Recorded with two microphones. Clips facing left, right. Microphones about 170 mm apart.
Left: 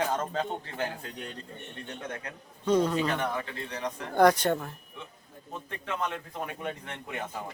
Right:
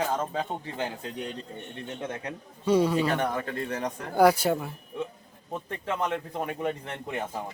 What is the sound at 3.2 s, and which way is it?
Speech, 45° right (ahead or behind).